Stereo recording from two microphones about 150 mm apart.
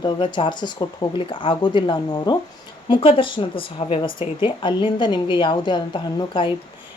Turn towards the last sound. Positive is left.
turn(degrees=30)  # may be behind; listen again after turning